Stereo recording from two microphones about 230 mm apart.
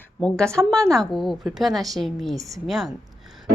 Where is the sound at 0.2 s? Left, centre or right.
Centre.